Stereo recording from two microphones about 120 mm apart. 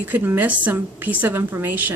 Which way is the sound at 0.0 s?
15° right (ahead or behind).